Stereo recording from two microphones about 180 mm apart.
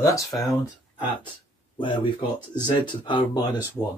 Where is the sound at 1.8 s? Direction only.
30° left (ahead or behind).